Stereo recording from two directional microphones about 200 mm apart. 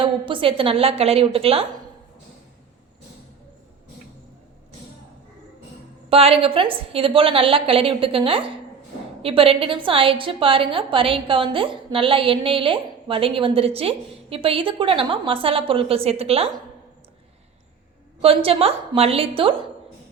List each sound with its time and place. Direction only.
0.0 s a woman's voice: 25° right (ahead or behind)
6.1 s a woman's voice: 30° right (ahead or behind)
18.2 s a woman's voice: 30° right (ahead or behind)